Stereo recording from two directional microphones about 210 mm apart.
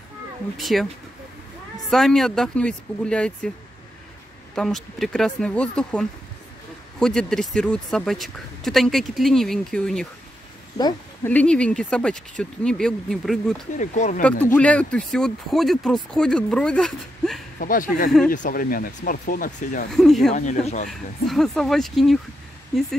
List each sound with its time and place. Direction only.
0.6 s speech: centre (ahead or behind)
1.9 s speech: centre (ahead or behind)
4.6 s speech: centre (ahead or behind)
11.2 s speech: 5° left (ahead or behind)
13.7 s speech: 35° left (ahead or behind)
14.2 s speech: 5° left (ahead or behind)
17.6 s speech: 40° left (ahead or behind)
19.9 s speech: centre (ahead or behind)
20.3 s speech: 35° left (ahead or behind)
20.9 s speech: centre (ahead or behind)